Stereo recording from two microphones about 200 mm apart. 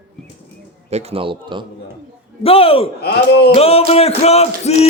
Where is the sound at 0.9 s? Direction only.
30° right (ahead or behind).